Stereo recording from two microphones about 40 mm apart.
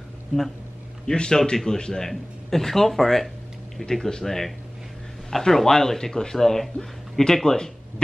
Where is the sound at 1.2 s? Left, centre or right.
Centre.